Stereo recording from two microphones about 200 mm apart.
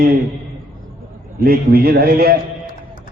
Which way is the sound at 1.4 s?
50° right (ahead or behind).